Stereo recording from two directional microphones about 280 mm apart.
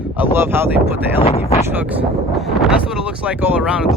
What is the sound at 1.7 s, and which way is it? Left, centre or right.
Speech, centre.